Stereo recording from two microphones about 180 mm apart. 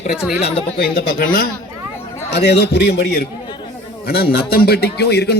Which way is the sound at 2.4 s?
70° left (ahead or behind).